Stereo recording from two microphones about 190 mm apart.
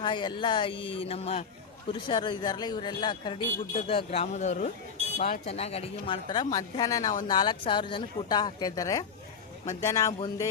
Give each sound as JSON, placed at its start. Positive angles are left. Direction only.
{"t": 0.0, "sound": "a man's voice", "side_deg": 25}